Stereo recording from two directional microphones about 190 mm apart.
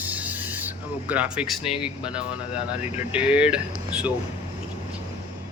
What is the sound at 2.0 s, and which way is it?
Speech, 5° right (ahead or behind).